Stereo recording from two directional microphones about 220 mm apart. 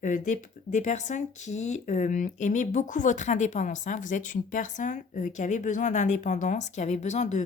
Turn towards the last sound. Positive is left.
turn(degrees=30)  # may be behind; listen again after turning